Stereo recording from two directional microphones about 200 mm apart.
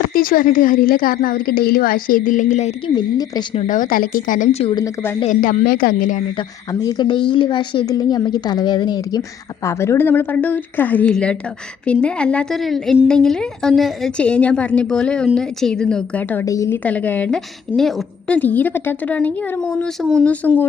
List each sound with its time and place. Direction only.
0.1 s a woman's voice: 45° left (ahead or behind); by 3.6 s 20° left (ahead or behind)
3.6 s a woman's voice: 40° left (ahead or behind)
4.7 s a woman's voice: 20° left (ahead or behind)
5.3 s a woman's voice: 40° left (ahead or behind)
6.3 s a woman's voice: 20° left (ahead or behind)